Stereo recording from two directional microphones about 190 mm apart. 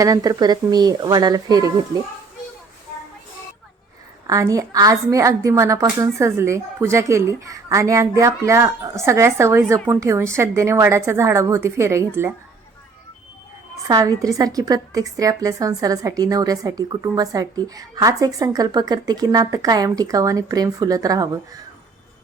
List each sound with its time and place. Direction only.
0.0 s a woman's voice: 20° right (ahead or behind)
4.3 s a woman's voice: 15° right (ahead or behind)
13.8 s a woman's voice: 15° right (ahead or behind)